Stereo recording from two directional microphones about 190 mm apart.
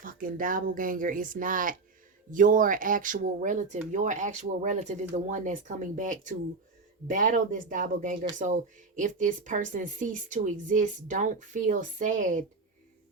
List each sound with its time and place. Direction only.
0.0 s a woman's voice: 45° right (ahead or behind)